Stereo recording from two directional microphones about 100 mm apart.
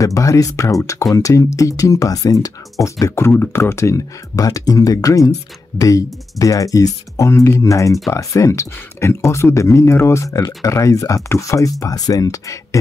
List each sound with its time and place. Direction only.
0.0 s speech: 35° left (ahead or behind)